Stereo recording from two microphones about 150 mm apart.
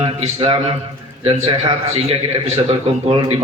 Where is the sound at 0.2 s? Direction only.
35° right (ahead or behind).